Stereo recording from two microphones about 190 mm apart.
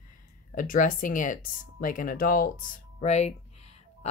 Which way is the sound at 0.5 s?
45° left (ahead or behind).